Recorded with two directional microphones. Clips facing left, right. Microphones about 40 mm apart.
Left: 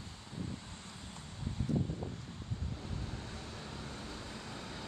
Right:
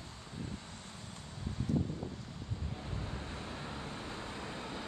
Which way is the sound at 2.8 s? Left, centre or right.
Centre.